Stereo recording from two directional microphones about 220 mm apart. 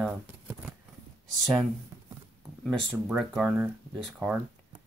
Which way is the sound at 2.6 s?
Centre (ahead or behind).